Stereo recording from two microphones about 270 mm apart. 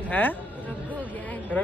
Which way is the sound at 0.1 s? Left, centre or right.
Centre.